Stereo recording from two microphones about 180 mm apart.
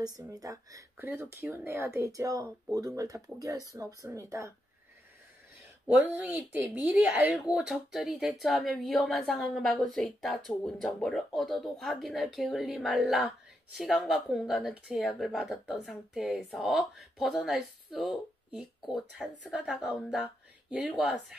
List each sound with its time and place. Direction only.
0.3 s speech: 20° right (ahead or behind)
6.1 s a woman's voice: 10° right (ahead or behind)